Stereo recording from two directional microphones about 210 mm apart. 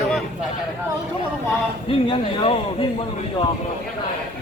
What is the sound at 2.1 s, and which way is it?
Speech, 25° left (ahead or behind).